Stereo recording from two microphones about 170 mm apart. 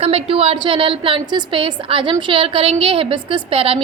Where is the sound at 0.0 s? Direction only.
35° right (ahead or behind).